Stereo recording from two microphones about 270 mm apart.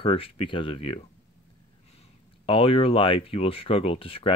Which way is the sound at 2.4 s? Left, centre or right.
Centre.